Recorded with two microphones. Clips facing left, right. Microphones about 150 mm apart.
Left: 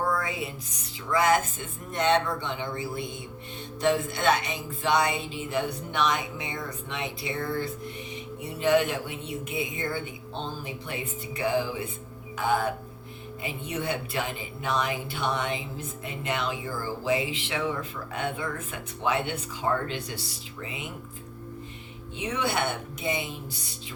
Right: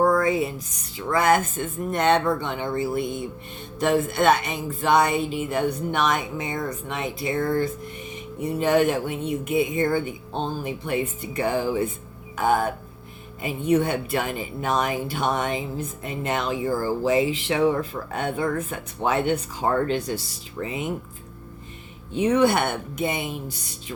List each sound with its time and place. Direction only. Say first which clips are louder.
0.0 s a sound: right 9 dB; 45° right (ahead or behind)
1.0 s speech: right 3 dB; 55° right (ahead or behind)
22.1 s speech: right 10 dB; 45° right (ahead or behind)